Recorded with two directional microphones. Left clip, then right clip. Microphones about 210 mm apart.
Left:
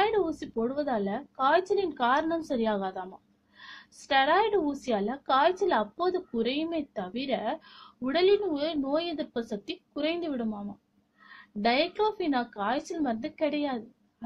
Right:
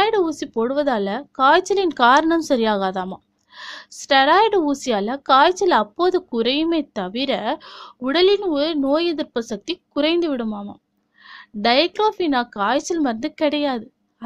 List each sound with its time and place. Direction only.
0.0 s a woman's voice: 45° right (ahead or behind)